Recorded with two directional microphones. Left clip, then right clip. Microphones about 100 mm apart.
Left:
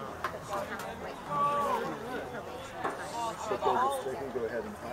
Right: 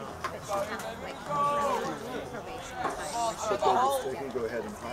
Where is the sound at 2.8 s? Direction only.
25° right (ahead or behind).